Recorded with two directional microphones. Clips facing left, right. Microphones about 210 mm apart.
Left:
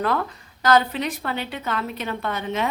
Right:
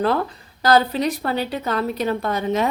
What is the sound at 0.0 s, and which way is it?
Speech, 30° right (ahead or behind).